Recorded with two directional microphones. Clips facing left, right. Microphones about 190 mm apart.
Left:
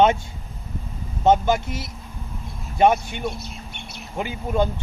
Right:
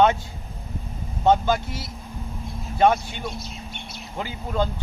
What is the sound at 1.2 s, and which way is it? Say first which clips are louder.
Speech: left 2 dB; 20° left (ahead or behind).